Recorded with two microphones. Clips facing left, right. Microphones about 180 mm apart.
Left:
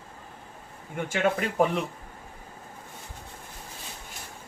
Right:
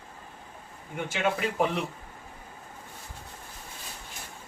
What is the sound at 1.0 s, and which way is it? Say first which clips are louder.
Speech: left 2 dB; 50° left (ahead or behind).